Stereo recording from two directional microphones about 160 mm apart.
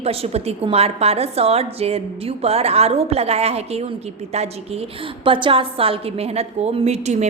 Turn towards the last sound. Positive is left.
turn(degrees=-45)  # may be behind; listen again after turning